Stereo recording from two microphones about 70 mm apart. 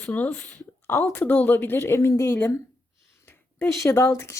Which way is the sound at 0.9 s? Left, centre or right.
Left.